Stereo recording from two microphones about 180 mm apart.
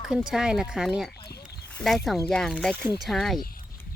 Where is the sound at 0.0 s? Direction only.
5° right (ahead or behind).